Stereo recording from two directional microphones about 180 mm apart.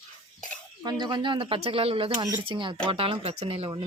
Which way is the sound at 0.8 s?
25° right (ahead or behind).